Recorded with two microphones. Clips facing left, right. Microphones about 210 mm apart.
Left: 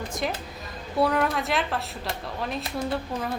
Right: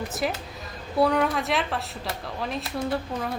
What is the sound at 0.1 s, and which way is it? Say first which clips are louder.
Speech: right 1 dB; 5° right (ahead or behind).